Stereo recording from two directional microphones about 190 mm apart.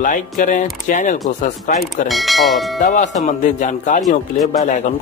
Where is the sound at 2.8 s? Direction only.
40° left (ahead or behind).